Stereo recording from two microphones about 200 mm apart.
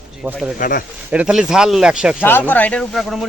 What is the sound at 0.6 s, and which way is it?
Speech, 45° left (ahead or behind).